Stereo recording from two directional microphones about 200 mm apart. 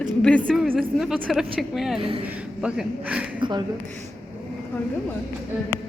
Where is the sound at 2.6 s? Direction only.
5° right (ahead or behind).